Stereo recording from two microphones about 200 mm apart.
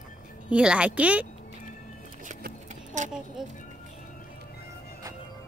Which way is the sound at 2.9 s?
40° right (ahead or behind).